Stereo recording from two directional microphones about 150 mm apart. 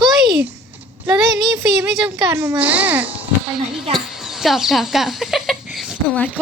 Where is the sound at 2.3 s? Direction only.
15° right (ahead or behind).